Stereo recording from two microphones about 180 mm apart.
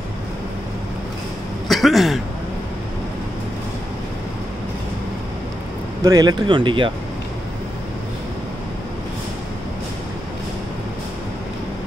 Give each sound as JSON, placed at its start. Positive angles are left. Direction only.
{"t": 1.7, "sound": "speech", "side_deg": 0}
{"t": 6.0, "sound": "speech", "side_deg": -20}